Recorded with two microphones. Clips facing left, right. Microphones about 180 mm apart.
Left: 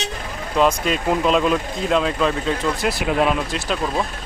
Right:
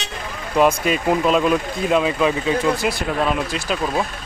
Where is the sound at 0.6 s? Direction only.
5° right (ahead or behind).